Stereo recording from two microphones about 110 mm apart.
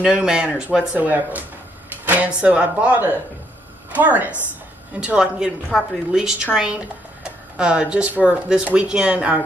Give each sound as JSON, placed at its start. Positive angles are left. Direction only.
{"t": 0.0, "sound": "speech", "side_deg": -5}
{"t": 5.7, "sound": "a woman's voice", "side_deg": 0}